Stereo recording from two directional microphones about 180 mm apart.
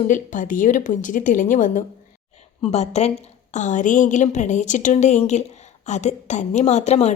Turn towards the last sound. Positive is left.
turn(degrees=40)  # may be behind; listen again after turning